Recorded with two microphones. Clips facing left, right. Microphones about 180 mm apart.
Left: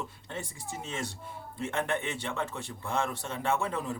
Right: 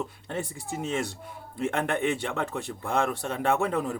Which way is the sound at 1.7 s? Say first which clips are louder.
Right 5 dB; 60° right (ahead or behind).